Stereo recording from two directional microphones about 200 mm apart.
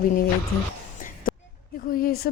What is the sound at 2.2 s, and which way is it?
Speech, 45° left (ahead or behind).